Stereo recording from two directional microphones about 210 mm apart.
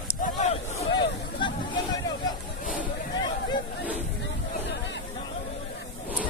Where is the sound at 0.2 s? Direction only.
35° left (ahead or behind).